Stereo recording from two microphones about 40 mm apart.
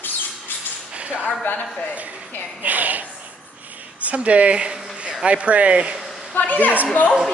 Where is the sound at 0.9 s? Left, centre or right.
Right.